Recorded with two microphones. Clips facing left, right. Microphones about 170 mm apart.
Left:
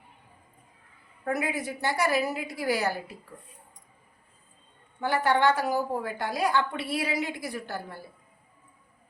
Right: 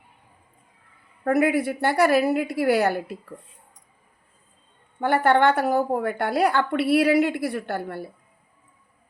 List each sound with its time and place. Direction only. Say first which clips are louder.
1.2 s a woman's voice: right 9 dB; 60° right (ahead or behind)
4.9 s a woman's voice: right 6 dB; 55° right (ahead or behind)